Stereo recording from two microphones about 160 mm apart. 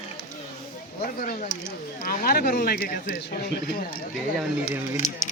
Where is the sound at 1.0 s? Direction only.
65° left (ahead or behind).